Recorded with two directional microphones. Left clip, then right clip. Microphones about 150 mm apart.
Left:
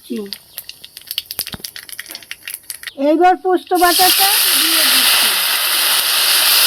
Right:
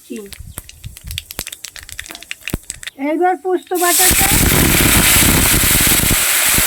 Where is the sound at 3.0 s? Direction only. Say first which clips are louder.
Left 4 dB; 40° left (ahead or behind).